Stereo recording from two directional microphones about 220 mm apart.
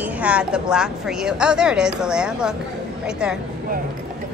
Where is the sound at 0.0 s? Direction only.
5° right (ahead or behind).